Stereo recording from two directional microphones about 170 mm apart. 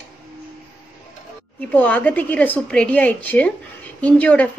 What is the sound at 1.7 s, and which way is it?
Speech, 10° left (ahead or behind).